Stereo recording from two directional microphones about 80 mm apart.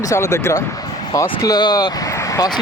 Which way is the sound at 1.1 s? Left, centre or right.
Left.